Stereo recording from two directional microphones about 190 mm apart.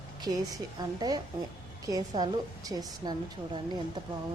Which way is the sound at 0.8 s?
20° right (ahead or behind).